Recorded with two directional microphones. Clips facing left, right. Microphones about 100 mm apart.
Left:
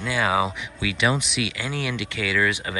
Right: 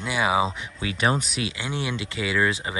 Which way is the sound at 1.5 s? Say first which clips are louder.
Left 1 dB; 25° right (ahead or behind).